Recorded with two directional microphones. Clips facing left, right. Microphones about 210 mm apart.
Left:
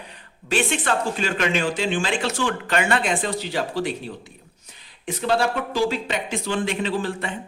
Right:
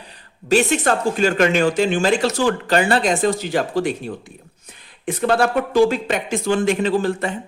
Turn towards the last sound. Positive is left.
turn(degrees=-45)  # may be behind; listen again after turning